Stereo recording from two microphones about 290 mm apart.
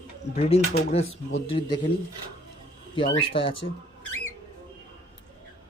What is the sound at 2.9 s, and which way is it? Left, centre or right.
Speech, centre.